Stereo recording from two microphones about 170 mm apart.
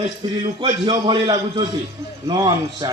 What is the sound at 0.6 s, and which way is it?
Speech, 30° right (ahead or behind).